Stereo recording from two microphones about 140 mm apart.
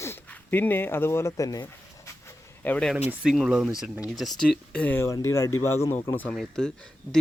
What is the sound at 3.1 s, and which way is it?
Speech, 5° right (ahead or behind).